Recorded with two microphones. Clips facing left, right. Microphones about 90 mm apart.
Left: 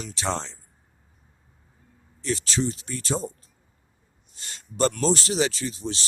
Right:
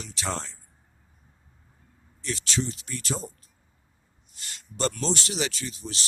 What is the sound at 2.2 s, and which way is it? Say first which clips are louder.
A man's voice: left 4 dB; 35° left (ahead or behind).